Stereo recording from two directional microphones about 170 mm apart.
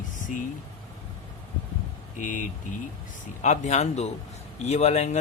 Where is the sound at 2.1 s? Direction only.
50° left (ahead or behind).